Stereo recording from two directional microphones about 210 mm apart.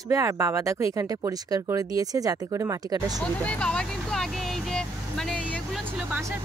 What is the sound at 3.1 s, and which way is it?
Vehicle, 5° left (ahead or behind).